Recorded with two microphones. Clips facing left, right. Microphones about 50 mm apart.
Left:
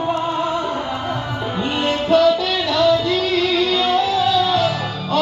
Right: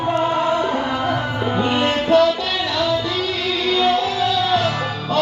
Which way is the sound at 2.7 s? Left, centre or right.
Right.